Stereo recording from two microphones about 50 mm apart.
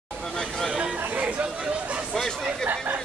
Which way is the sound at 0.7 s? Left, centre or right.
Centre.